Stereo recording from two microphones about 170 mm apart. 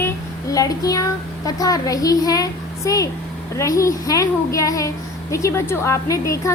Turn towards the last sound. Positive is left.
turn(degrees=20)  # may be behind; listen again after turning